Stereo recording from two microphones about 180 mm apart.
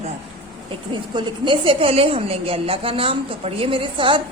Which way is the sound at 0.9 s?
25° right (ahead or behind).